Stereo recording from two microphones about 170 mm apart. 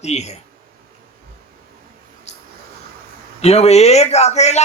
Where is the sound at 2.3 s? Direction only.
40° left (ahead or behind).